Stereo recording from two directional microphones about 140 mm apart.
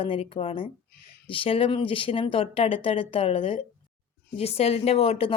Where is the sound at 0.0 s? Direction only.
40° left (ahead or behind).